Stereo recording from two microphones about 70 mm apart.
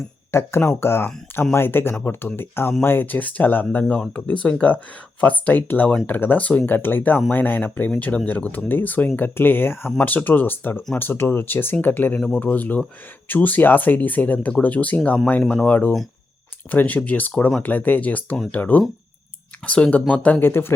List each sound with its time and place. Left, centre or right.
0.3 s speech: left; by 15.7 s centre
16.7 s speech: left